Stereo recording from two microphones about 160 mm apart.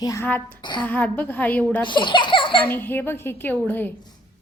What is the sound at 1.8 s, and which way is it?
Speech, 30° left (ahead or behind).